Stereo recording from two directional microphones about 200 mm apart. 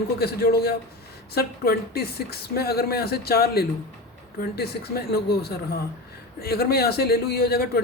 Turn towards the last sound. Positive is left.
turn(degrees=50)  # may be behind; listen again after turning